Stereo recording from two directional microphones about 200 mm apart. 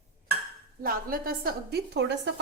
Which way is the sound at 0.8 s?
50° right (ahead or behind).